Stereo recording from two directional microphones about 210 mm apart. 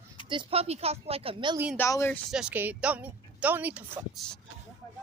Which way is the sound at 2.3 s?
5° right (ahead or behind).